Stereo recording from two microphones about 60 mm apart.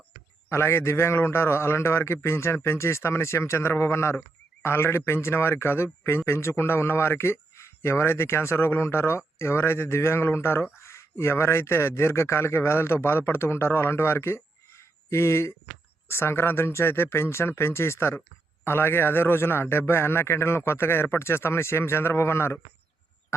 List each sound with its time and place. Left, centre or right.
0.5 s a man's voice: left